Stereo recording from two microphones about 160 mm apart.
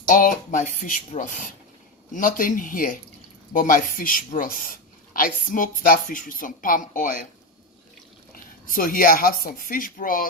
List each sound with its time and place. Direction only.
0.1 s speech: 55° left (ahead or behind)
8.6 s speech: 60° left (ahead or behind)